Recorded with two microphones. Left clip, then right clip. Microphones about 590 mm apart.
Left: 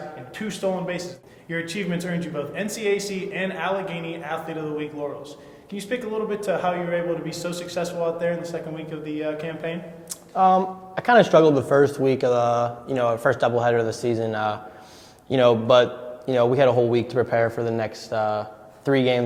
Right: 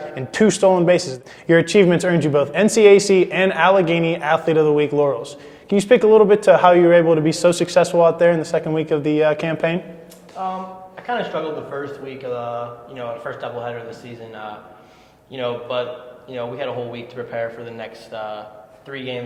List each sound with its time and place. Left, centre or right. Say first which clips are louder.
0.3 s speech: right 13 dB; right
10.4 s speech: left 8 dB; left